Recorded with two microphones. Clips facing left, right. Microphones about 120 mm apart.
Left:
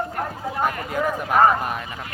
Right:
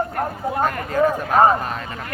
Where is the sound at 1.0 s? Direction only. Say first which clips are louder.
Right 3 dB; 30° right (ahead or behind).